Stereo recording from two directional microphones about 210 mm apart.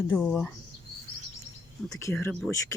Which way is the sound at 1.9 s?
10° left (ahead or behind).